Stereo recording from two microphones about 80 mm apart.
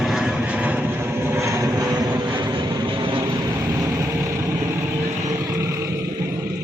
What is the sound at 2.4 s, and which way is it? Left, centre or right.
Vehicle, right.